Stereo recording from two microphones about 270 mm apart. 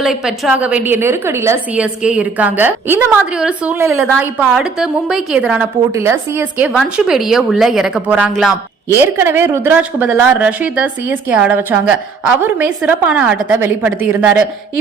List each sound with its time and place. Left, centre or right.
0.0 s a woman's voice: centre